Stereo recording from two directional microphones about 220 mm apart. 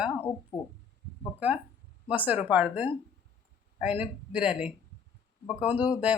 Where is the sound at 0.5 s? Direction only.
20° left (ahead or behind).